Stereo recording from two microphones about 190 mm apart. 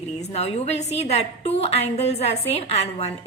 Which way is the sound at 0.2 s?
35° left (ahead or behind).